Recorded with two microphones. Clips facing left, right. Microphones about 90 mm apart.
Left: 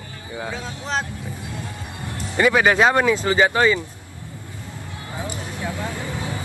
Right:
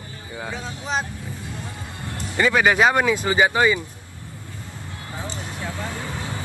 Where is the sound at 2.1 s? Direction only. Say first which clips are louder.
Left 2 dB; 10° left (ahead or behind).